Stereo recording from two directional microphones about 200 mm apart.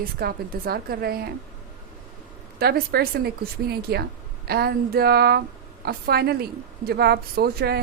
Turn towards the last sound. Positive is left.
turn(degrees=-50)  # may be behind; listen again after turning